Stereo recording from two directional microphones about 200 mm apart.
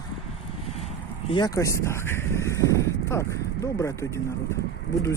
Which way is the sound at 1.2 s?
25° left (ahead or behind).